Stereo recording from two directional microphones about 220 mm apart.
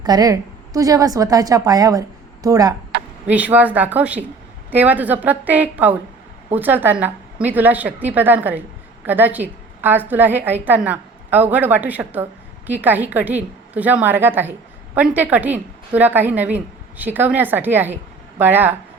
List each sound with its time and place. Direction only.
0.0 s a woman's voice: 15° right (ahead or behind)